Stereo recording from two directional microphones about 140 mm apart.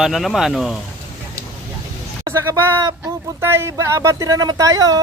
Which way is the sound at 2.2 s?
20° right (ahead or behind).